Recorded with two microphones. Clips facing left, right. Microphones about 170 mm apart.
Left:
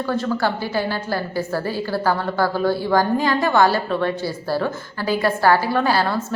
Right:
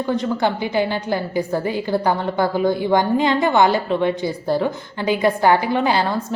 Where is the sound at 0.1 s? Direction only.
20° right (ahead or behind).